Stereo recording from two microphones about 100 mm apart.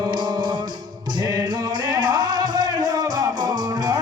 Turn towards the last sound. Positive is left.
turn(degrees=-40)  # may be behind; listen again after turning